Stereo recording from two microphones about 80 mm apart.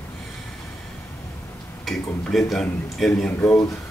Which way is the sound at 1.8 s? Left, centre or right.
Centre.